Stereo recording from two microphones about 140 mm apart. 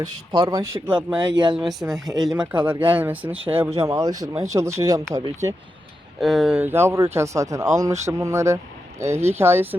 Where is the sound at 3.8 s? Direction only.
25° right (ahead or behind).